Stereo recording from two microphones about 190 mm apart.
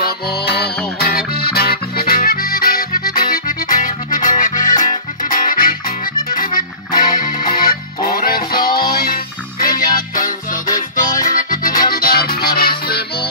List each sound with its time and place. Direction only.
0.0 s music: 55° left (ahead or behind)